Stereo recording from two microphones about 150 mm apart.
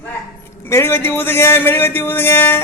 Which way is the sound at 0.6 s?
15° left (ahead or behind).